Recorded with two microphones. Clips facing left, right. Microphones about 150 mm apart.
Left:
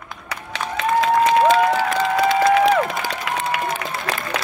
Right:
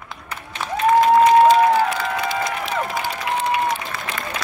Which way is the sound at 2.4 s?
90° left.